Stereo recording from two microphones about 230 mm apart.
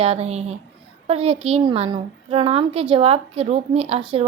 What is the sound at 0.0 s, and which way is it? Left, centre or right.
Speech, right.